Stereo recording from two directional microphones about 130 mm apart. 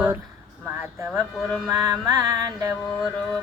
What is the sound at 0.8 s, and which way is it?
Speech, 20° right (ahead or behind).